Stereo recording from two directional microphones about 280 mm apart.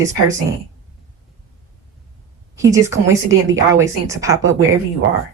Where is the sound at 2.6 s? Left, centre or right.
Centre.